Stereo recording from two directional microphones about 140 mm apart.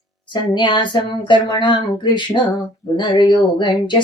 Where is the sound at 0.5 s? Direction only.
35° left (ahead or behind).